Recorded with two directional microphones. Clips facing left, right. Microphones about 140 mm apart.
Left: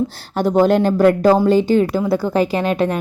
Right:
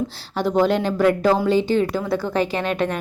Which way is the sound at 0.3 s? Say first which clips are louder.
Left 5 dB; 45° left (ahead or behind).